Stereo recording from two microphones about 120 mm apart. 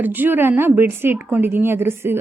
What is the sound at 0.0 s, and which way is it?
A woman's voice, 15° right (ahead or behind).